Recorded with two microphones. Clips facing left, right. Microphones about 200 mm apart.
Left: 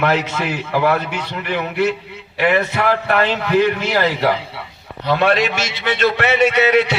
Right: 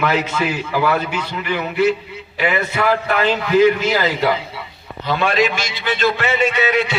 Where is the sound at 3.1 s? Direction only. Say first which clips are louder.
Right 1 dB; 60° left (ahead or behind).